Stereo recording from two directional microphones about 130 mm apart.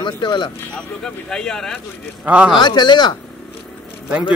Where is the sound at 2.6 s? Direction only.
35° left (ahead or behind).